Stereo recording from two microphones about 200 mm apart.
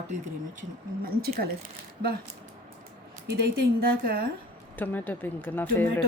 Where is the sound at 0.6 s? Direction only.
45° right (ahead or behind).